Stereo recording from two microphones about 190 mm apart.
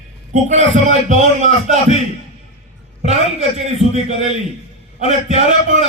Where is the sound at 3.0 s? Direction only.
35° right (ahead or behind).